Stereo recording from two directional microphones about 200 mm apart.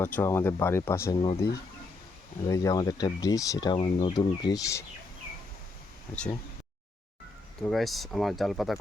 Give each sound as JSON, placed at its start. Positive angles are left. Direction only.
{"t": 0.0, "sound": "speech", "side_deg": 10}
{"t": 2.5, "sound": "speech", "side_deg": 15}
{"t": 7.6, "sound": "speech", "side_deg": 0}